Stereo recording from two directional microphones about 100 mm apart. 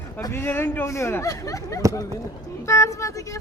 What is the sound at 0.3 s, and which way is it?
Speech, 20° left (ahead or behind).